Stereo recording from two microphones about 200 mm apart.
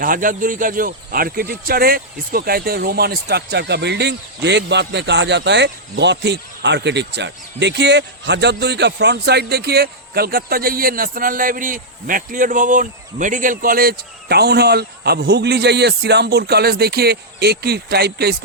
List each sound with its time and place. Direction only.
0.0 s speech: 45° right (ahead or behind)